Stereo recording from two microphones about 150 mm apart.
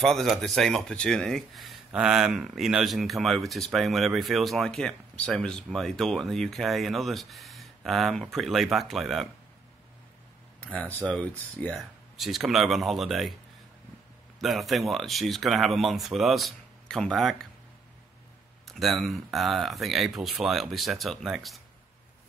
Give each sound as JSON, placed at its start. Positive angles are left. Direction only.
{"t": 0.0, "sound": "speech", "side_deg": 0}
{"t": 10.6, "sound": "speech", "side_deg": 10}
{"t": 14.4, "sound": "speech", "side_deg": 0}
{"t": 18.7, "sound": "speech", "side_deg": 0}